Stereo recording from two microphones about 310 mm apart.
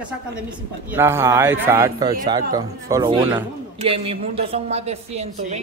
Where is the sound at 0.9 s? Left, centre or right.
Centre.